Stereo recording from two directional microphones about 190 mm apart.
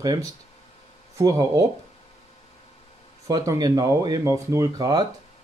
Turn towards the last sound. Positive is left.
turn(degrees=-20)  # may be behind; listen again after turning